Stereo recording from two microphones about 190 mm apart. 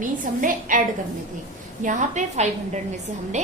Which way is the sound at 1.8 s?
40° right (ahead or behind).